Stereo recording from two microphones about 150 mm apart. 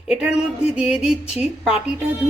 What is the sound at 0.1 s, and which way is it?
A woman's voice, 5° right (ahead or behind).